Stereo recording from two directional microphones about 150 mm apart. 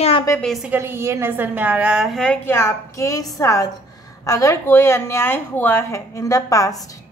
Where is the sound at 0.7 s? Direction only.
15° right (ahead or behind).